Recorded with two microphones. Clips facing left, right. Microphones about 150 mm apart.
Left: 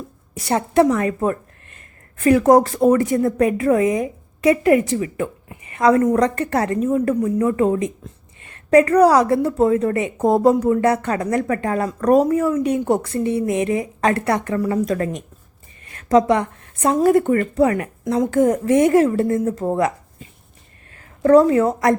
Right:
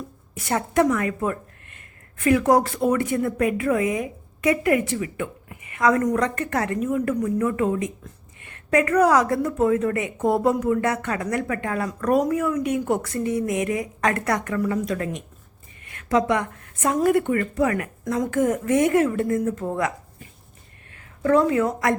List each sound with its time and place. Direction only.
0.3 s a woman's voice: 35° left (ahead or behind)
14.8 s a woman's voice: 40° left (ahead or behind)
20.9 s a woman's voice: 40° left (ahead or behind)